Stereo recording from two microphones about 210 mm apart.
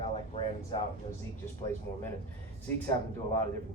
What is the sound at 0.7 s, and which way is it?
Speech, 20° left (ahead or behind).